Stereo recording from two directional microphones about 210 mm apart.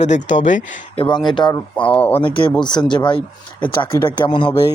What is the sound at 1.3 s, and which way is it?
Speech, 20° left (ahead or behind).